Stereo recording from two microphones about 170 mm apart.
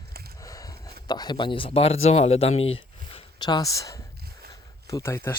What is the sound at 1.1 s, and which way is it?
Speech, 25° left (ahead or behind).